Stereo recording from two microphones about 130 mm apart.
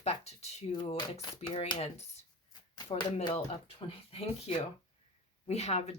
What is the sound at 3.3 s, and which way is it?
Speech, 45° left (ahead or behind).